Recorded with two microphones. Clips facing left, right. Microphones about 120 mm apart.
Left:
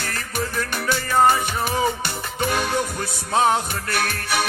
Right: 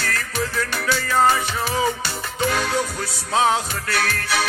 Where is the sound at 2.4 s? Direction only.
15° left (ahead or behind).